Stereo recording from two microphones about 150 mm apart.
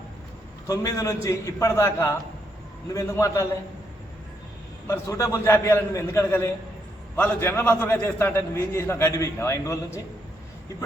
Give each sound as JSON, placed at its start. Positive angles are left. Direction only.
{"t": 0.7, "sound": "a man's voice", "side_deg": 20}
{"t": 4.9, "sound": "a man's voice", "side_deg": 20}